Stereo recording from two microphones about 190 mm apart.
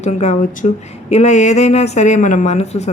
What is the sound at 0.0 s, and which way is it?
A woman's voice, 35° left (ahead or behind).